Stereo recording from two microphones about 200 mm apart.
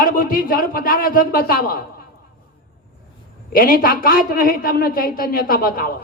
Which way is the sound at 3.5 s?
45° left (ahead or behind).